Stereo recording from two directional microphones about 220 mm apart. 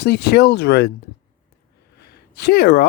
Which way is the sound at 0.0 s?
50° left (ahead or behind).